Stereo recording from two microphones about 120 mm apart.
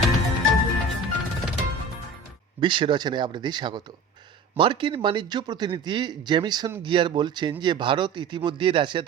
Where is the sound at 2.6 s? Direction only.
40° right (ahead or behind).